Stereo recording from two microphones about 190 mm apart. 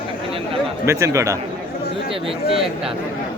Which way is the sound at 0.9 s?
15° right (ahead or behind).